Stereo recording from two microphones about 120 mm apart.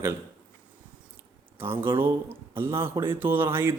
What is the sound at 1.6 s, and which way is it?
A man's voice, 20° right (ahead or behind).